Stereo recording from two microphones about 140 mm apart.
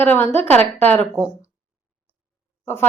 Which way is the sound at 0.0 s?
15° left (ahead or behind).